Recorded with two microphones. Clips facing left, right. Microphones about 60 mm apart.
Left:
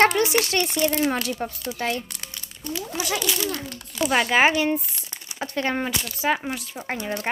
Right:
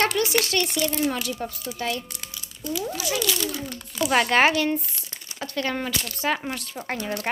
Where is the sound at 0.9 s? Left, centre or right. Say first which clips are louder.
Left 2 dB; left.